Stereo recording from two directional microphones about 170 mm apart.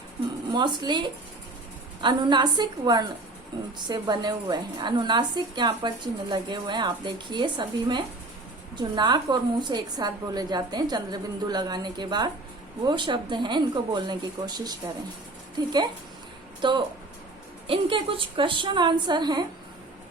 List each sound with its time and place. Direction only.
0.5 s a woman's voice: 25° right (ahead or behind)